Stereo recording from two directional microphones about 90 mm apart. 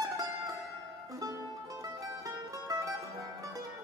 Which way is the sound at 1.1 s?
40° right (ahead or behind).